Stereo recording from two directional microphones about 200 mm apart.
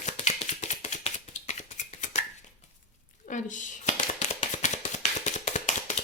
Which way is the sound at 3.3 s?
40° left (ahead or behind).